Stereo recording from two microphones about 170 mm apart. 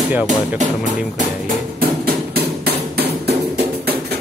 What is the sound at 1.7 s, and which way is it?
Music, 60° right (ahead or behind).